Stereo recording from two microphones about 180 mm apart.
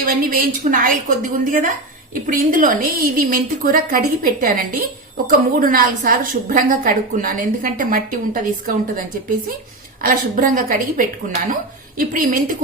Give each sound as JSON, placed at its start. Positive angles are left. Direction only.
{"t": 0.0, "sound": "a woman's voice", "side_deg": -50}